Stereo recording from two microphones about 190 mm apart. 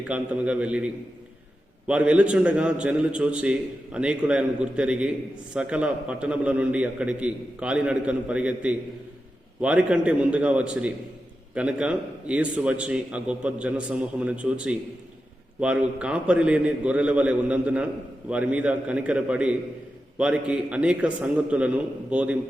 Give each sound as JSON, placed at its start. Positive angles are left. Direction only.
{"t": 0.1, "sound": "a man's voice", "side_deg": -5}
{"t": 1.9, "sound": "a man's voice", "side_deg": -5}